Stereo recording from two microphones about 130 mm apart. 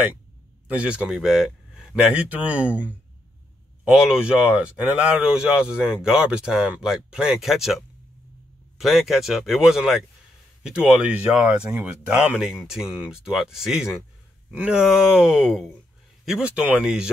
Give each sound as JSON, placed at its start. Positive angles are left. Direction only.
{"t": 0.7, "sound": "speech", "side_deg": -10}